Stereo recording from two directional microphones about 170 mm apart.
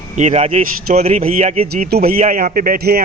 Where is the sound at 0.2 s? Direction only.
40° right (ahead or behind).